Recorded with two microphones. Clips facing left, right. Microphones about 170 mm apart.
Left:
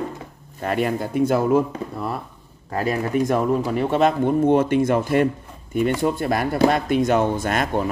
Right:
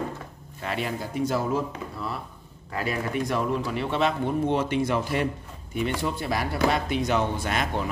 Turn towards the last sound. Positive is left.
turn(degrees=50)  # may be behind; listen again after turning